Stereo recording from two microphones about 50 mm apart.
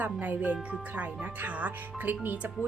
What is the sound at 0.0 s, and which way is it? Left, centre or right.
Speech, right.